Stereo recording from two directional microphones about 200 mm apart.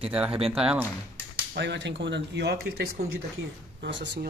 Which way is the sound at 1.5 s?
60° right (ahead or behind).